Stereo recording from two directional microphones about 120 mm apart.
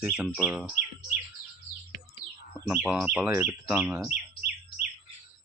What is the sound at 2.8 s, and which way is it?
Speech, 15° right (ahead or behind).